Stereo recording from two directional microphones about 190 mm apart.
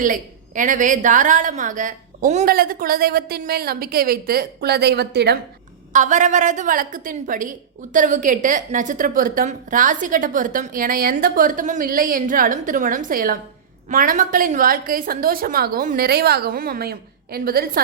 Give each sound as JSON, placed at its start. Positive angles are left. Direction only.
{"t": 0.0, "sound": "a woman's voice", "side_deg": -45}
{"t": 5.9, "sound": "a woman's voice", "side_deg": -40}